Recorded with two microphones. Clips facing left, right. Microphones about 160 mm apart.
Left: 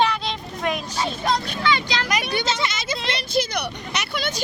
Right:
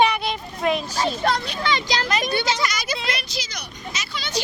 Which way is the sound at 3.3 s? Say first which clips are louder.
Left 11 dB; 55° left (ahead or behind).